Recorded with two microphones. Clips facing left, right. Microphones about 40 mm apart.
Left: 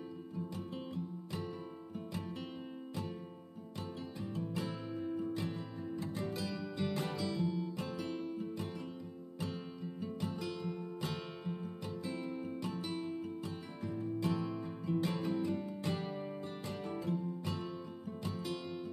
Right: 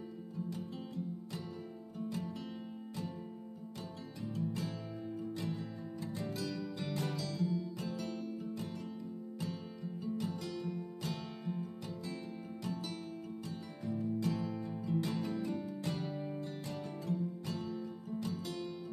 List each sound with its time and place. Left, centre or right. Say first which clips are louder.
2.0 s music: right 3 dB; left
6.1 s music: even; centre
10.4 s music: even; centre
17.0 s music: right 1 dB; left